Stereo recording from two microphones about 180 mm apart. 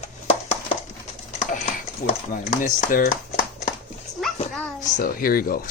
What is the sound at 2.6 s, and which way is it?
Speech, 50° left (ahead or behind).